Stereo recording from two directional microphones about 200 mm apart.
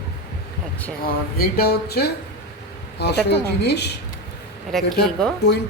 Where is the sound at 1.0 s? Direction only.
50° left (ahead or behind).